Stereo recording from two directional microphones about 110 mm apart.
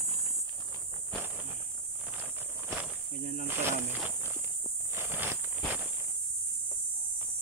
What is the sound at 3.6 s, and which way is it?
Cricket, 20° right (ahead or behind).